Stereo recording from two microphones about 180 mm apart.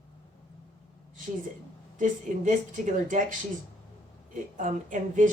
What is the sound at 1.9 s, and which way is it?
Speech, 45° right (ahead or behind).